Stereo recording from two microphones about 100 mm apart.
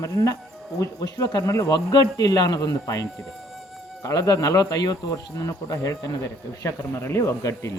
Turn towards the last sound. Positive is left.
turn(degrees=30)  # may be behind; listen again after turning